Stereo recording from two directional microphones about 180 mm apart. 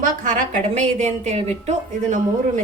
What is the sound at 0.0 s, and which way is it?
A woman's voice, 45° right (ahead or behind).